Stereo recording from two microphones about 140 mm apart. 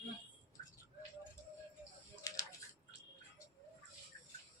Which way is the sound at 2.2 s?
25° left (ahead or behind).